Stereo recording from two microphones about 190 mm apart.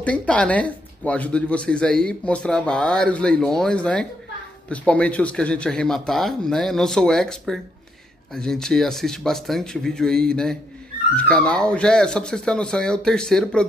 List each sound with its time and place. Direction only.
0.0 s speech: 5° left (ahead or behind)